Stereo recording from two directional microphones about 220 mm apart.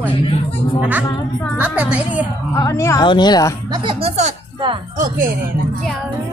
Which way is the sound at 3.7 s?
25° right (ahead or behind).